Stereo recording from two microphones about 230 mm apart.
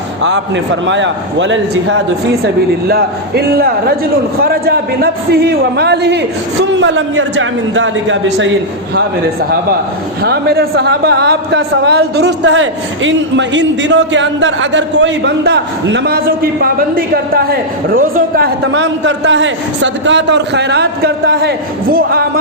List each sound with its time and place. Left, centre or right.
0.2 s a man's voice: right
2.8 s a man's voice: right
10.2 s a man's voice: right